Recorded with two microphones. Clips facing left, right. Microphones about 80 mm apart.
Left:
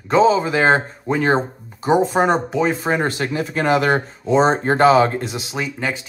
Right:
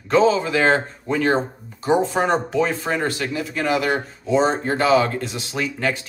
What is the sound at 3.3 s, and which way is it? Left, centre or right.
Speech, left.